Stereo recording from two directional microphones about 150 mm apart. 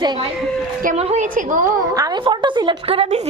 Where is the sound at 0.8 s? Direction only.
45° right (ahead or behind).